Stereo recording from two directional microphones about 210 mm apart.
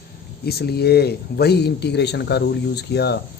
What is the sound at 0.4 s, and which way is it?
Speech, 50° left (ahead or behind).